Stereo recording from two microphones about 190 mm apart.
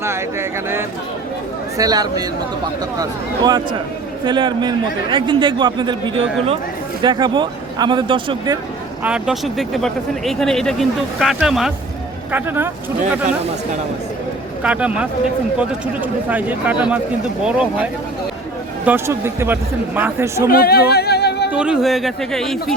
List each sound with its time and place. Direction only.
0.0 s a man's voice: 15° right (ahead or behind)
9.0 s a man's voice: 5° right (ahead or behind)
14.6 s a man's voice: 5° right (ahead or behind)
18.9 s a man's voice: 10° right (ahead or behind)
20.5 s a sound: 55° left (ahead or behind)
21.5 s speech: 5° right (ahead or behind)